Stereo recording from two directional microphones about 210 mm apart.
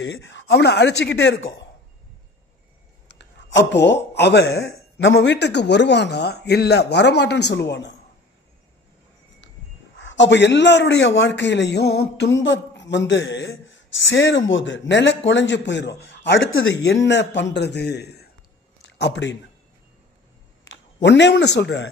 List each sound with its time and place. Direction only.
0.0 s speech: 60° left (ahead or behind)
3.1 s speech: 55° left (ahead or behind)
9.9 s a man's voice: 60° left (ahead or behind)
20.6 s a man's voice: 55° left (ahead or behind)